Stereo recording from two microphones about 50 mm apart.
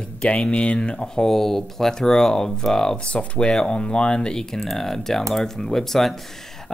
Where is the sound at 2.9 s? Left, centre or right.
Left.